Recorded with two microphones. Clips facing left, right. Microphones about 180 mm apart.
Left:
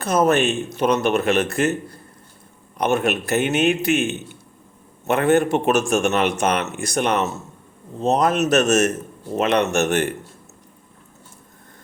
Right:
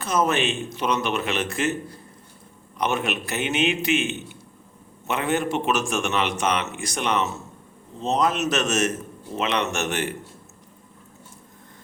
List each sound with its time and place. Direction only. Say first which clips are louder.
0.0 s a man's voice: left 5 dB; 60° left (ahead or behind)
2.7 s a man's voice: left 5 dB; 45° left (ahead or behind)
5.0 s a man's voice: left 7 dB; 55° left (ahead or behind)
7.9 s a man's voice: left 4 dB; 55° left (ahead or behind)